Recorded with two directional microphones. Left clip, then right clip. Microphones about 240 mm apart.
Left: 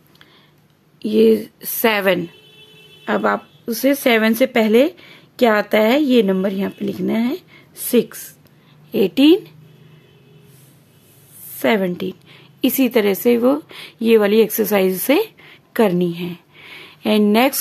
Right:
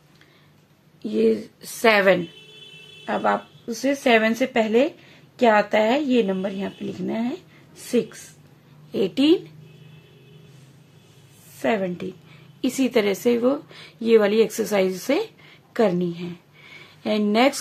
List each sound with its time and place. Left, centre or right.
1.0 s speech: left
11.6 s a woman's voice: left